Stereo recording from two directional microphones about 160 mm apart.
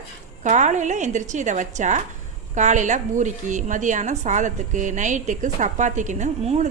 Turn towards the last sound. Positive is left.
turn(degrees=-45)  # may be behind; listen again after turning